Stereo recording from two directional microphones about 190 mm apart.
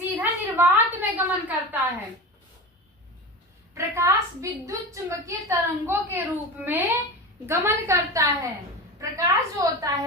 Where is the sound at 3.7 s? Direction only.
15° right (ahead or behind).